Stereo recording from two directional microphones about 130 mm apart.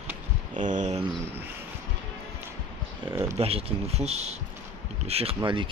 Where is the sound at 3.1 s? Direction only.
20° right (ahead or behind).